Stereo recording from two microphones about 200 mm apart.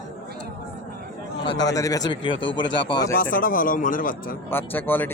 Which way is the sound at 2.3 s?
65° left (ahead or behind).